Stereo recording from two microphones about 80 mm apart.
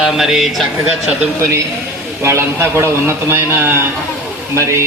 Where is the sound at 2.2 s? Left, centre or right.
Right.